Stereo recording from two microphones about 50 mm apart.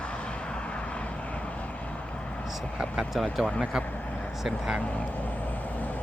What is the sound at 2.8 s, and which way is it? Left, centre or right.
Speech, centre.